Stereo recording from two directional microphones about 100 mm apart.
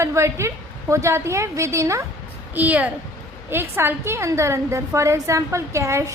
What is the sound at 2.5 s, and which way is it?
A woman's voice, 15° right (ahead or behind).